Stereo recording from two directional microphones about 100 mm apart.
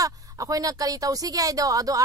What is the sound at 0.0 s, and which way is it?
Speech, 35° right (ahead or behind).